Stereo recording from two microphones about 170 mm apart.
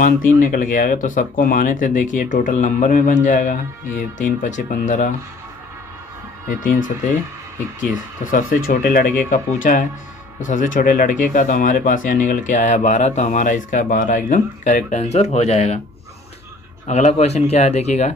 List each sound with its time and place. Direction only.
0.0 s speech: 55° left (ahead or behind)
6.5 s speech: 50° left (ahead or behind)
16.8 s speech: 40° left (ahead or behind)